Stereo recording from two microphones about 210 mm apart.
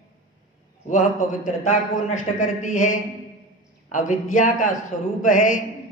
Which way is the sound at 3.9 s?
35° left (ahead or behind).